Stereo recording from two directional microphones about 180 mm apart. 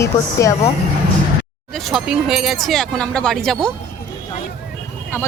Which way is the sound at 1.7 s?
Centre (ahead or behind).